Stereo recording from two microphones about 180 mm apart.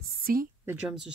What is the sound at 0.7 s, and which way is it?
Speech, 5° right (ahead or behind).